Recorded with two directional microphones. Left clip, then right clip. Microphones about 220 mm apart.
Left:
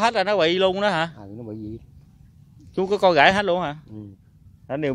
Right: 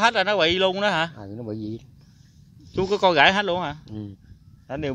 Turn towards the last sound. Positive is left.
turn(degrees=15)  # may be behind; listen again after turning